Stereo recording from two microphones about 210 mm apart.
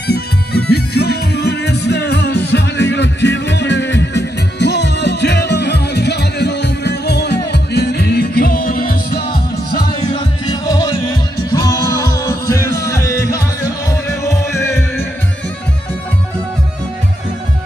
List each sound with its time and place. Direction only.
0.0 s music: 50° left (ahead or behind)
10.1 s music: 20° left (ahead or behind)